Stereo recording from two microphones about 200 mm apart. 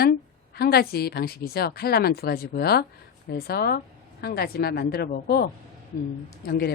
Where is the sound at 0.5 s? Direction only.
50° left (ahead or behind).